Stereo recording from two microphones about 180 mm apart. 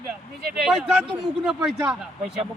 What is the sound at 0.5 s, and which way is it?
A man's voice, 5° right (ahead or behind).